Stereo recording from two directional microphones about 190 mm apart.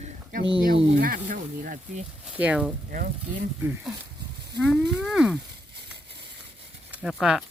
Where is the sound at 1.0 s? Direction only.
45° right (ahead or behind).